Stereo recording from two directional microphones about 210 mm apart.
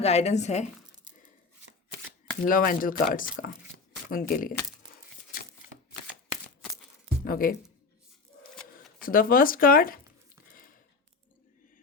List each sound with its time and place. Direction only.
0.0 s speech: 30° left (ahead or behind)
2.5 s speech: 40° left (ahead or behind)
7.3 s speech: 40° left (ahead or behind)
9.0 s speech: 45° left (ahead or behind)